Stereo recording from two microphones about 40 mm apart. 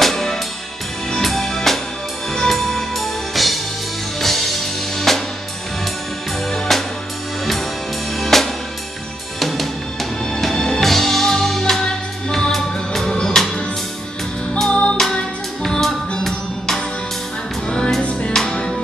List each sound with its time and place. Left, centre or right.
0.0 s music: centre
1.1 s drum kit: centre
2.3 s music: centre
4.9 s drum kit: centre
6.7 s music: centre
8.2 s drum kit: centre
9.4 s music: centre
14.6 s music: left
15.6 s music: centre
17.6 s music: left
18.3 s music: centre